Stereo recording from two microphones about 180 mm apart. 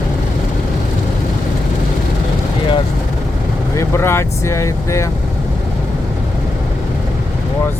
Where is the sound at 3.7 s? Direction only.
15° left (ahead or behind).